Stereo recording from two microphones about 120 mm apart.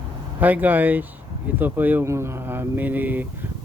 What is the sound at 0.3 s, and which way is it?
Speech, 15° right (ahead or behind).